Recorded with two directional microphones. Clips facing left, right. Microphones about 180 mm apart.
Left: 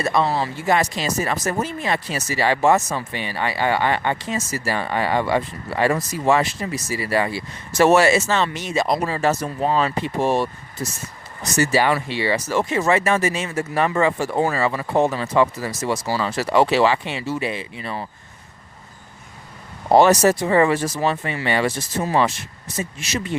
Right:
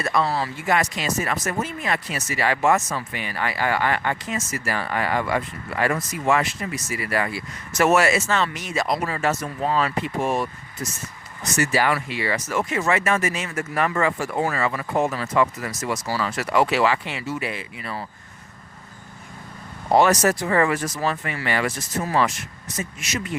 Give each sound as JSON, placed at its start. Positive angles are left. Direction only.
{"t": 0.0, "sound": "speech", "side_deg": 25}
{"t": 19.9, "sound": "speech", "side_deg": 30}